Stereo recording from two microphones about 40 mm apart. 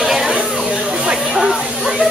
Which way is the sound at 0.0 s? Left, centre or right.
Centre.